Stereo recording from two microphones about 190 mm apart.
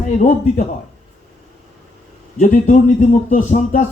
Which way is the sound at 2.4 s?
40° left (ahead or behind).